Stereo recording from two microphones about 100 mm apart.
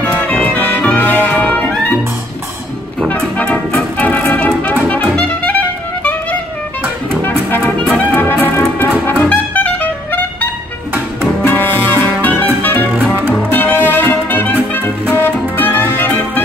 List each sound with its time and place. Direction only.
0.0 s music: 15° left (ahead or behind)
3.1 s music: 10° left (ahead or behind)
4.3 s brass instrument: 10° left (ahead or behind)
7.2 s music: 20° left (ahead or behind)
9.0 s brass instrument: 15° left (ahead or behind)
11.4 s music: 20° left (ahead or behind)
12.9 s music: 20° right (ahead or behind)
13.5 s music: 20° left (ahead or behind)